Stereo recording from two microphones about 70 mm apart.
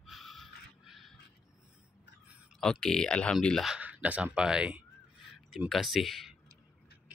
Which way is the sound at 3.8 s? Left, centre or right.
Right.